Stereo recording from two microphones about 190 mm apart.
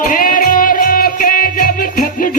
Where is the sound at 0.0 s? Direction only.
45° left (ahead or behind).